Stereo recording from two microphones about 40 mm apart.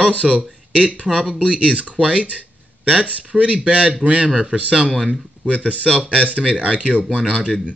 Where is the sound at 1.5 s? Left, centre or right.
Right.